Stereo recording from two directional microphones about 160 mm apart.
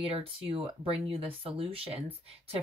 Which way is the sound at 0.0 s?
35° right (ahead or behind).